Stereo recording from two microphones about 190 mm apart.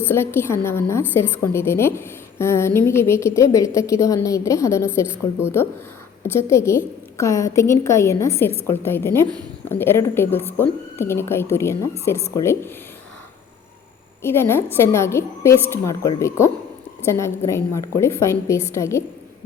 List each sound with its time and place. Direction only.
0.0 s a woman's voice: 10° left (ahead or behind)
14.2 s a woman's voice: 15° left (ahead or behind)